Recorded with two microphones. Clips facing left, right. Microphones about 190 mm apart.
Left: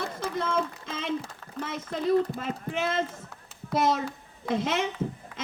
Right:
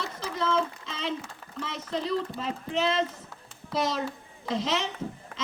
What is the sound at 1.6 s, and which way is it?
A man's voice, 50° left (ahead or behind).